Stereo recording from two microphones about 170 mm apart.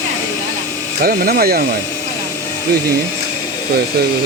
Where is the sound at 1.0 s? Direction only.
60° right (ahead or behind).